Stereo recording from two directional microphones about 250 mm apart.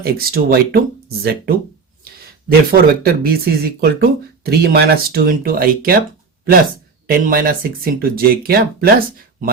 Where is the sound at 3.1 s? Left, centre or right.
Right.